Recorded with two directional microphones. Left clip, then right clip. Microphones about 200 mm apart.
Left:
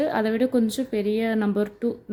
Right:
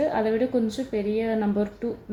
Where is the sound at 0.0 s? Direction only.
45° left (ahead or behind).